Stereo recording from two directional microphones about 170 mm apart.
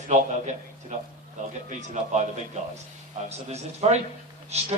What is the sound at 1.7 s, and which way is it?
Speech, 45° right (ahead or behind).